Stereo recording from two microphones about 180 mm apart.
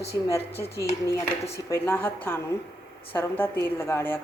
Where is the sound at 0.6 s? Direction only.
15° left (ahead or behind).